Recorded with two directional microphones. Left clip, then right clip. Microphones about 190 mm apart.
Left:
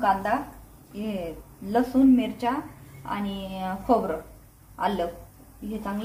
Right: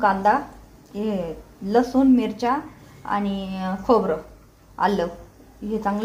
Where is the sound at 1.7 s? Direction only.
40° right (ahead or behind).